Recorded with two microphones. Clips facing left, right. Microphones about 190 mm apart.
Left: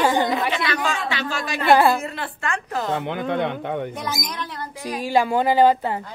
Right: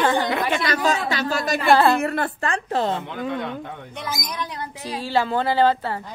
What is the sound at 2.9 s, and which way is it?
Speech, 70° left (ahead or behind).